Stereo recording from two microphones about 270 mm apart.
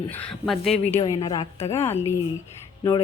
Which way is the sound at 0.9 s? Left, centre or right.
Centre.